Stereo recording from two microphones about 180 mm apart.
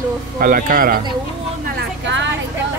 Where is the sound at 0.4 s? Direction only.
50° right (ahead or behind).